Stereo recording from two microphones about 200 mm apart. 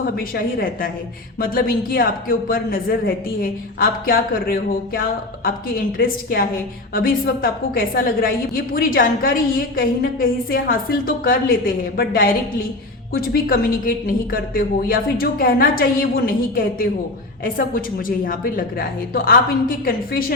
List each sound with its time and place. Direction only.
0.2 s a woman's voice: 45° left (ahead or behind)
6.0 s a woman's voice: 45° left (ahead or behind)